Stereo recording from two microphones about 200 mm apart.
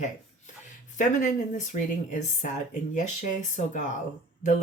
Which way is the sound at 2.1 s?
35° left (ahead or behind).